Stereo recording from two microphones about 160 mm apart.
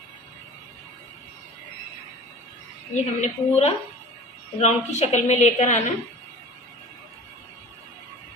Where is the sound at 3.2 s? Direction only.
45° left (ahead or behind).